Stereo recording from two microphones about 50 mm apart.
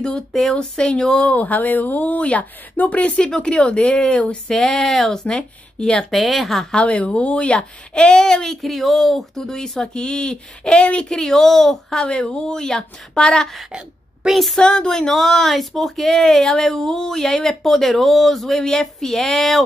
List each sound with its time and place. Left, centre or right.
0.0 s speech: centre
1.3 s speech: left
4.5 s speech: centre
6.1 s speech: centre
6.7 s speech: left
11.1 s speech: centre
13.7 s a sound: centre
14.3 s speech: centre
14.6 s speech: centre